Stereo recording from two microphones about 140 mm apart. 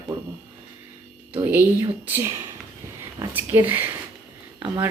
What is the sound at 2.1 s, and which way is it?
Speech, 20° right (ahead or behind).